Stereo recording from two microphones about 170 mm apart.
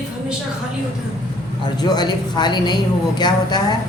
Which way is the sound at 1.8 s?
25° left (ahead or behind).